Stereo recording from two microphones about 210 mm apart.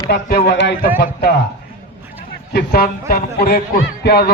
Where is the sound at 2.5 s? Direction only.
50° left (ahead or behind).